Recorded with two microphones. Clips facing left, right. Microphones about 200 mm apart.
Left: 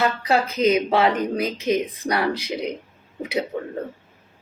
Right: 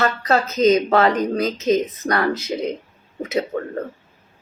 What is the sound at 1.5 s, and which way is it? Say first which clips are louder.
Speech: right 4 dB; 25° right (ahead or behind).